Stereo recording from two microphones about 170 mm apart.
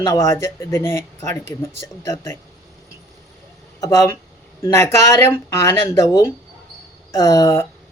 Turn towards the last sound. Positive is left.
turn(degrees=15)  # may be behind; listen again after turning